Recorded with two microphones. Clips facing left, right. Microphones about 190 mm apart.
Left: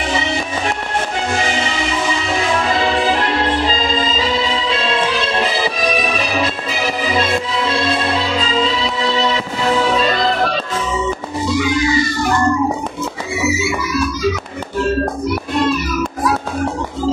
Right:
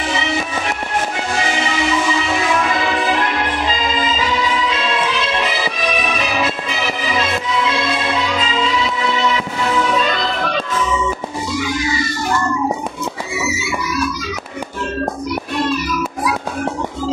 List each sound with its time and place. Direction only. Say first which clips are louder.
2.5 s music: left 3 dB; 35° left (ahead or behind)
7.1 s music: left 2 dB; 35° left (ahead or behind)